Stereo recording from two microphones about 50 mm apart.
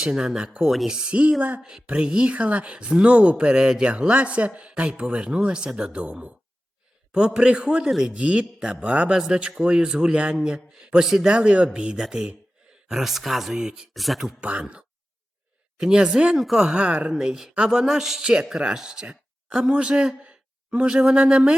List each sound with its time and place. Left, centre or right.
0.0 s speech: centre
7.9 s a man's voice: centre
11.0 s speech: centre
11.3 s speech: right
12.9 s speech: centre
13.9 s speech: centre
14.4 s speech: right
17.1 s speech: centre